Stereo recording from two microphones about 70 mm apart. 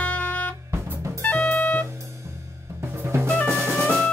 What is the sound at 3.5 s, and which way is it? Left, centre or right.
Music, right.